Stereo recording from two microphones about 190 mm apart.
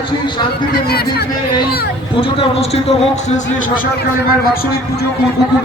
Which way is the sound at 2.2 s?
30° left (ahead or behind).